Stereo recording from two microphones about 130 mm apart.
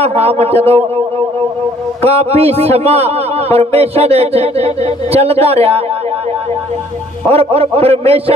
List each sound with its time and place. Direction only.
0.0 s a man's voice: 50° right (ahead or behind)
2.0 s a man's voice: 50° right (ahead or behind)
7.2 s a man's voice: 50° right (ahead or behind)